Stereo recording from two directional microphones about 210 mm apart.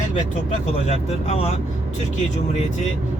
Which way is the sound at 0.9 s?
30° left (ahead or behind).